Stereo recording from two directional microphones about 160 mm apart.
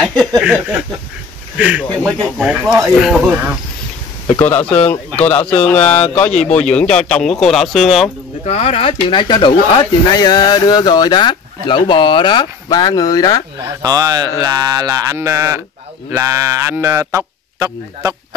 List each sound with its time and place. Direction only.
0.4 s speech: 5° right (ahead or behind)
4.4 s speech: 10° left (ahead or behind)
8.5 s speech: 40° left (ahead or behind); by 13.4 s 20° left (ahead or behind)
13.6 s speech: 20° right (ahead or behind)